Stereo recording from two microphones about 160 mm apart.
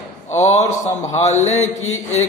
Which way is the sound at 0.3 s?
45° left (ahead or behind).